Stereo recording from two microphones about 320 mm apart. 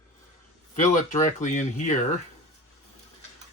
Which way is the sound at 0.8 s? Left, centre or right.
Left.